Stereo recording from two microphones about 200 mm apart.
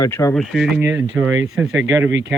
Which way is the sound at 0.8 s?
15° right (ahead or behind).